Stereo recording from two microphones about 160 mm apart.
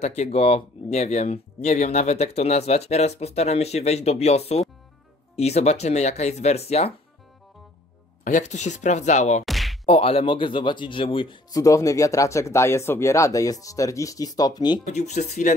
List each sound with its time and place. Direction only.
0.0 s speech: 45° left (ahead or behind)
8.2 s speech: 50° left (ahead or behind)
9.5 s a sound: centre (ahead or behind)
9.8 s speech: 35° left (ahead or behind)
14.9 s speech: 45° left (ahead or behind)